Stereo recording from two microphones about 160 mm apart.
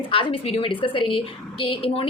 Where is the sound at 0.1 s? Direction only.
35° left (ahead or behind).